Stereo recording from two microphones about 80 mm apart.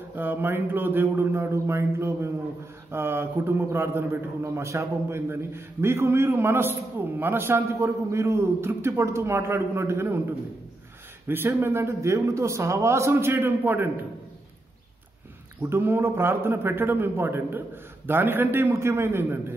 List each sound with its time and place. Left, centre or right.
0.1 s a man's voice: right
11.2 s a man's voice: right
15.6 s a man's voice: right